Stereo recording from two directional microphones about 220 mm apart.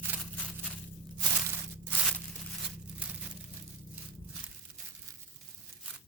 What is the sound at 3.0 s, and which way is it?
Crumpling, 5° right (ahead or behind).